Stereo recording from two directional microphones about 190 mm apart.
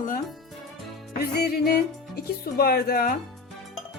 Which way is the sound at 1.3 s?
55° left (ahead or behind).